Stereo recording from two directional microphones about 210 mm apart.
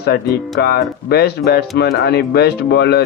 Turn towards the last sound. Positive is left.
turn(degrees=50)  # may be behind; listen again after turning